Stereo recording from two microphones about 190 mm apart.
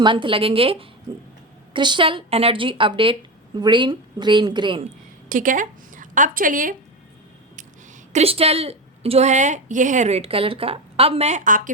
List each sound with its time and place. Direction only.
0.0 s speech: 25° right (ahead or behind)
5.3 s a woman's voice: 45° right (ahead or behind)
8.1 s a woman's voice: 30° right (ahead or behind)